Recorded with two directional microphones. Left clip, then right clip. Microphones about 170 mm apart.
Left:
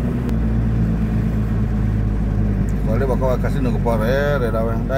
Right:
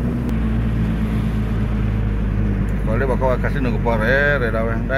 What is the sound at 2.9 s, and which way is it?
Speech, 15° left (ahead or behind).